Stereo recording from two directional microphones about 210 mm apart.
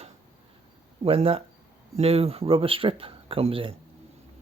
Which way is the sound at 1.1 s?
25° right (ahead or behind).